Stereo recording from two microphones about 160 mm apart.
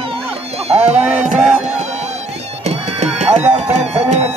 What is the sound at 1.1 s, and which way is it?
Music, 45° right (ahead or behind).